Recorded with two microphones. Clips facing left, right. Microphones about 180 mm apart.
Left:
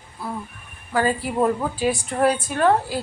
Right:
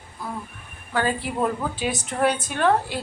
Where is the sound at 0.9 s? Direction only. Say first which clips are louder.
Left 3 dB; 5° left (ahead or behind).